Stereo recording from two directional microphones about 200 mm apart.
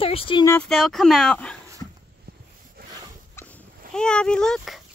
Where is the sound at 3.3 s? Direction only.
5° left (ahead or behind).